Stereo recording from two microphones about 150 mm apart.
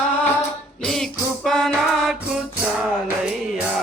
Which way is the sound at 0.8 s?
5° left (ahead or behind).